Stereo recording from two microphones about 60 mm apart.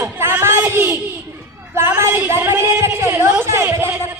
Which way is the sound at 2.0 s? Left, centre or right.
Right.